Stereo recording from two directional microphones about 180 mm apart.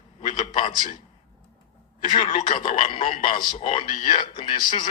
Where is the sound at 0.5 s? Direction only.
30° left (ahead or behind).